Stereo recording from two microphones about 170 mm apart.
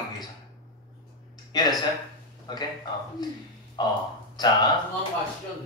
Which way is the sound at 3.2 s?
25° left (ahead or behind).